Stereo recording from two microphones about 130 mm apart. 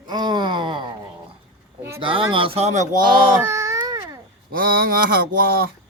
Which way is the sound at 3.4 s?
20° right (ahead or behind).